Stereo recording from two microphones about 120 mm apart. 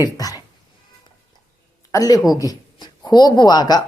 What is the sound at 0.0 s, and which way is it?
Speech, 30° left (ahead or behind).